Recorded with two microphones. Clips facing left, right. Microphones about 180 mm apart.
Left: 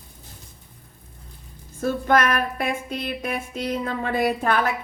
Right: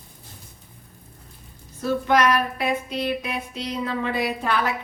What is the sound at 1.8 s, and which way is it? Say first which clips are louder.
Speech: even; 50° left (ahead or behind).